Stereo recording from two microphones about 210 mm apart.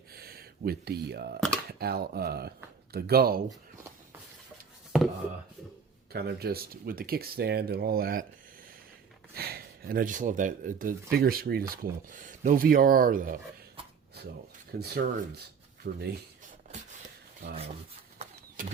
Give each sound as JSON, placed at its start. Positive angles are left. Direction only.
{"t": 0.1, "sound": "a sound", "side_deg": -45}
{"t": 1.8, "sound": "speech", "side_deg": -45}
{"t": 6.1, "sound": "speech", "side_deg": -50}
{"t": 9.3, "sound": "speech", "side_deg": -50}
{"t": 14.7, "sound": "speech", "side_deg": -50}
{"t": 18.2, "sound": "bird", "side_deg": -40}